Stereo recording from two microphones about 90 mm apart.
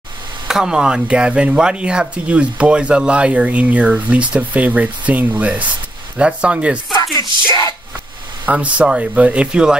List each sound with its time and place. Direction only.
0.5 s speech: 5° right (ahead or behind)
7.0 s music: 40° left (ahead or behind)
8.5 s speech: 15° right (ahead or behind)